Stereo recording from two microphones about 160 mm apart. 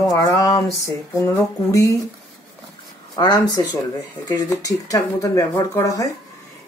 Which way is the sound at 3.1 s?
25° left (ahead or behind).